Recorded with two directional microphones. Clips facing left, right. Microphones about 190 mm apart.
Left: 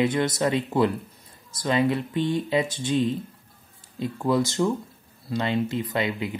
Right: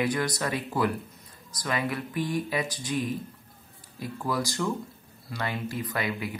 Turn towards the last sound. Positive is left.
turn(degrees=25)  # may be behind; listen again after turning